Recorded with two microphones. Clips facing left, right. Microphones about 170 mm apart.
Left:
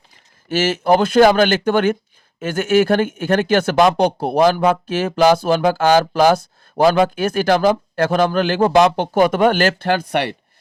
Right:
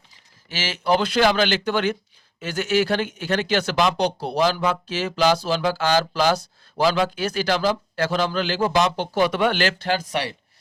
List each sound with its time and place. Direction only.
0.4 s speech: 50° left (ahead or behind)